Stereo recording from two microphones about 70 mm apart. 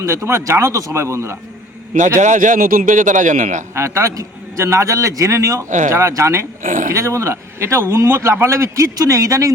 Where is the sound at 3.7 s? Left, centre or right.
Right.